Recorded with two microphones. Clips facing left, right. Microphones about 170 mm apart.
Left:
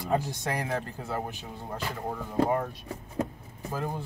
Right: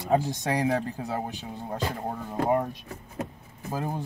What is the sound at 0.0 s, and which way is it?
Speech, 20° right (ahead or behind).